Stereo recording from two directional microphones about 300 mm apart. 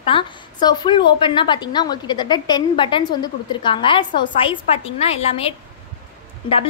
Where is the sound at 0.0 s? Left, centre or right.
Centre.